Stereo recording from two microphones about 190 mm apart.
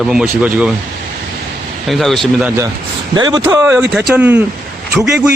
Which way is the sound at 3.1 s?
20° right (ahead or behind).